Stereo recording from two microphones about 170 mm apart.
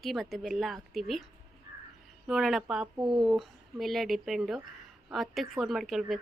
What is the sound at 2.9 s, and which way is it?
Speech, 25° right (ahead or behind).